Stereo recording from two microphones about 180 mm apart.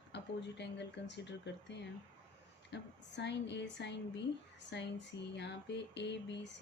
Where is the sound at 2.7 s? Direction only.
75° left (ahead or behind).